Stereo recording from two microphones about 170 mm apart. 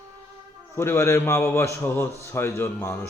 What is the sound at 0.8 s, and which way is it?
Speech, 15° left (ahead or behind).